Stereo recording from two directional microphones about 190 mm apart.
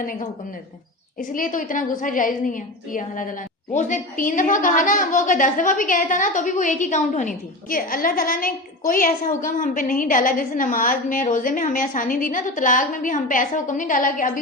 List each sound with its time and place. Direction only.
0.0 s a woman's voice: 45° left (ahead or behind)